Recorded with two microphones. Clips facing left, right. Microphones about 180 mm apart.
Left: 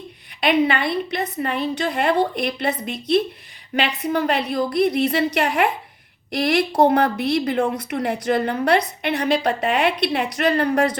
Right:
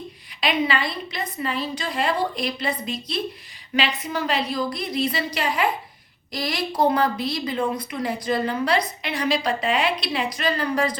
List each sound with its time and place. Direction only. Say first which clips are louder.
0.4 s a woman's voice: left 5 dB; 60° left (ahead or behind)